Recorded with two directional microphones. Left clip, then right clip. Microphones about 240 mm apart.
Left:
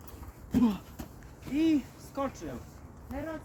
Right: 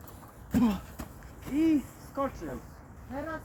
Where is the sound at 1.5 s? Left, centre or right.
Left.